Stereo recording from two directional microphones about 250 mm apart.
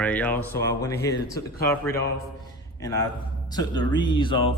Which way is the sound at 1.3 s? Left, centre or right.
Left.